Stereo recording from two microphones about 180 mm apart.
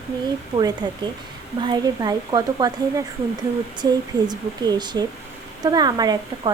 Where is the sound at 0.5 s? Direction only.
25° right (ahead or behind).